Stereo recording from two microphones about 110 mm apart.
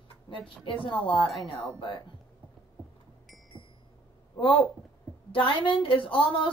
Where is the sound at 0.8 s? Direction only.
50° left (ahead or behind).